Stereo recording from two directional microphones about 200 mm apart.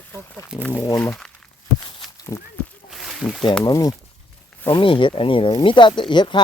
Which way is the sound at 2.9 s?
Centre (ahead or behind).